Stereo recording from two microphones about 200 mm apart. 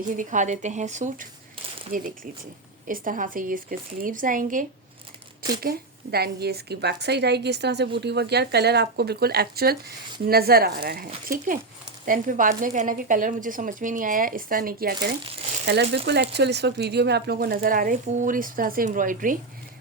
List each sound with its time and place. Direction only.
0.2 s a woman's voice: 40° right (ahead or behind)